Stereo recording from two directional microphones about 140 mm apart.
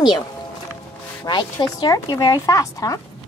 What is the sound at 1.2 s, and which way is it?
Speech, 30° left (ahead or behind).